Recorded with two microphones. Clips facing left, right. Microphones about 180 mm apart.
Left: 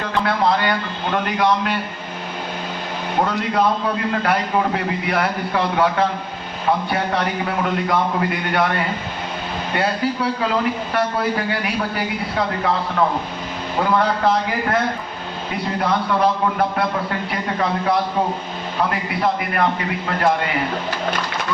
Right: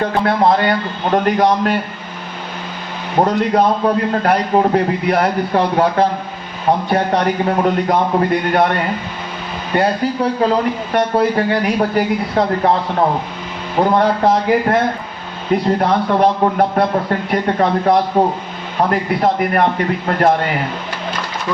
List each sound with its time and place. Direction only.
0.0 s a man's voice: 40° right (ahead or behind)
3.2 s a man's voice: 40° right (ahead or behind)
9.7 s a man's voice: 35° right (ahead or behind)
15.8 s a man's voice: 45° right (ahead or behind)